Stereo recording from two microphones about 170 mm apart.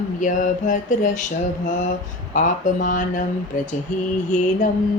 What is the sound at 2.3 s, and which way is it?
A woman's voice, 50° left (ahead or behind).